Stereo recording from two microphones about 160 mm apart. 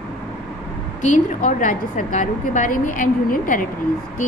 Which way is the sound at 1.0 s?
50° left (ahead or behind).